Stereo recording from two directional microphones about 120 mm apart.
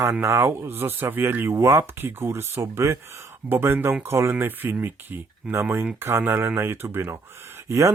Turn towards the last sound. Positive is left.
turn(degrees=-25)  # may be behind; listen again after turning